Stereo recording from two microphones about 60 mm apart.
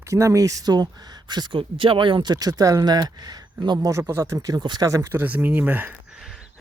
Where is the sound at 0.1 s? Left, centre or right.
Right.